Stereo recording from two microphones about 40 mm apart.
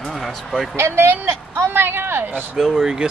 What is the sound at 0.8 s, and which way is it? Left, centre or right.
Speech, right.